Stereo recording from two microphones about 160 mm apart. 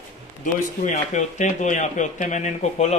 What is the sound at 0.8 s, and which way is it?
Speech, 50° left (ahead or behind).